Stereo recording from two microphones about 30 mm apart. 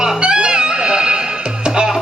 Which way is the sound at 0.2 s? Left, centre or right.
Right.